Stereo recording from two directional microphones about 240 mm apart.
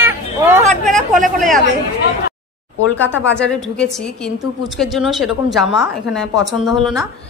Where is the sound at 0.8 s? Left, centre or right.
Centre.